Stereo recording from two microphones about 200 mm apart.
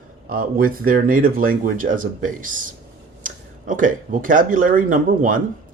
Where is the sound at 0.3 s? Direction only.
45° right (ahead or behind).